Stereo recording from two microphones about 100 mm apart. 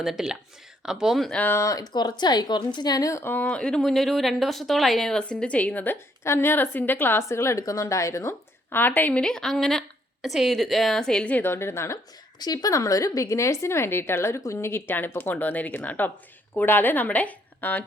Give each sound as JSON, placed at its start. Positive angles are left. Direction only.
{"t": 0.0, "sound": "speech", "side_deg": -5}
{"t": 1.3, "sound": "a woman's voice", "side_deg": 15}
{"t": 1.5, "sound": "speech", "side_deg": 35}
{"t": 12.4, "sound": "a woman's voice", "side_deg": 40}